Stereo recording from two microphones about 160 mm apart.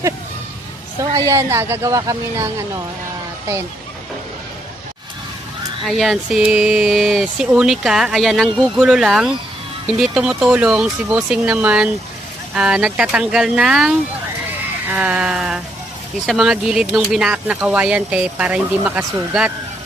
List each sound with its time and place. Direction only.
1.1 s speech: 20° right (ahead or behind)
5.8 s speech: centre (ahead or behind)